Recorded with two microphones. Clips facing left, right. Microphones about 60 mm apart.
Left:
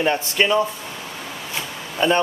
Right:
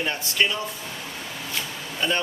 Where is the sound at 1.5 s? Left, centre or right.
Left.